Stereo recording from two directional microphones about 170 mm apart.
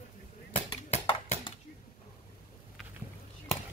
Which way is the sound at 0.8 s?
40° left (ahead or behind).